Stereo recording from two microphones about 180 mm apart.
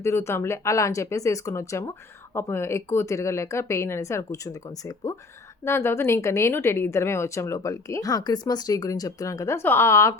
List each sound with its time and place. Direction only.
0.0 s speech: 15° left (ahead or behind)